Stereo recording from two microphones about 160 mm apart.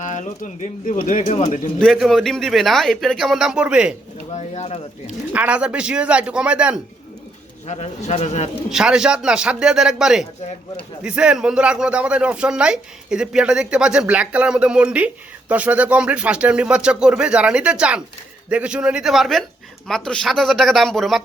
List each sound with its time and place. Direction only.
0.0 s bird: 50° left (ahead or behind)
1.0 s speech: 50° left (ahead or behind)
1.8 s speech: centre (ahead or behind)
4.4 s speech: 45° left (ahead or behind)
5.0 s speech: 10° right (ahead or behind)
7.7 s speech: 45° left (ahead or behind)
8.7 s speech: 5° right (ahead or behind)